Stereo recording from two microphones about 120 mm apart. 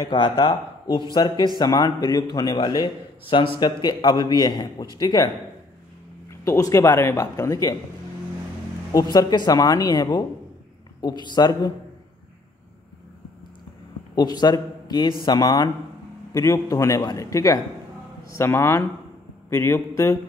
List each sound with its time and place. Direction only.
0.0 s speech: 40° left (ahead or behind)
6.4 s speech: 25° left (ahead or behind)
9.1 s speech: 35° left (ahead or behind)
14.1 s speech: 35° left (ahead or behind)